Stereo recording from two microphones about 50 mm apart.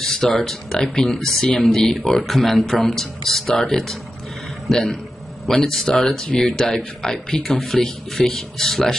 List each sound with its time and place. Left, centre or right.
0.2 s speech: centre